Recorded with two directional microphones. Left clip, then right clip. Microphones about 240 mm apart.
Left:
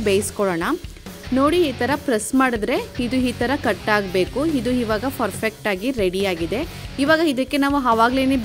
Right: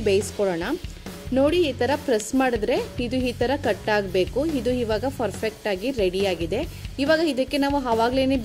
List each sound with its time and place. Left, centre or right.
0.0 s speech: left